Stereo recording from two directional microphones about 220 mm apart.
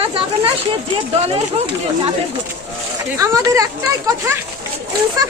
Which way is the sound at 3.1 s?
15° right (ahead or behind).